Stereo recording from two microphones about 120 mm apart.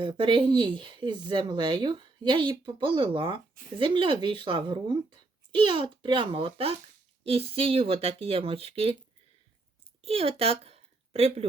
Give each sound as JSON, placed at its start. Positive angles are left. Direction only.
{"t": 0.0, "sound": "speech", "side_deg": -45}
{"t": 10.0, "sound": "a woman's voice", "side_deg": -55}